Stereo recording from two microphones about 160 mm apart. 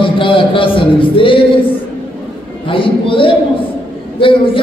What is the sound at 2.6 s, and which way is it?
A man's voice, 35° left (ahead or behind).